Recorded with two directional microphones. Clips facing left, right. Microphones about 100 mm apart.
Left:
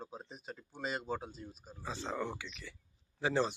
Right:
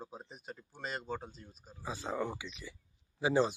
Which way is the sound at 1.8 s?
10° right (ahead or behind).